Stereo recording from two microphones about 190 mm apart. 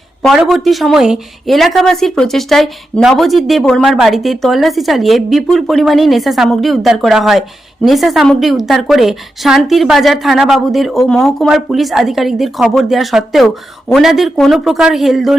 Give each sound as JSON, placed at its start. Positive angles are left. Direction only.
{"t": 0.2, "sound": "a woman's voice", "side_deg": 0}